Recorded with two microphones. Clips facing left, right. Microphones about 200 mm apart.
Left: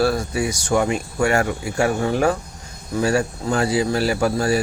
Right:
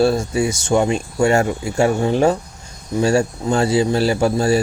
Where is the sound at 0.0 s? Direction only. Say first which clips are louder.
Right 4 dB; 25° right (ahead or behind).